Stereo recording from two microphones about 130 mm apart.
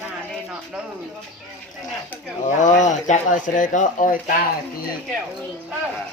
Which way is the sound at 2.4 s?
70° left (ahead or behind).